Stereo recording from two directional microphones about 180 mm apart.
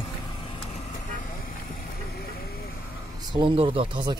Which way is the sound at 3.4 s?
30° right (ahead or behind).